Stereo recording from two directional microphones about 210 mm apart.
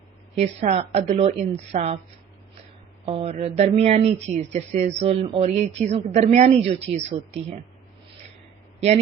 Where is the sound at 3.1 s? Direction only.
30° right (ahead or behind).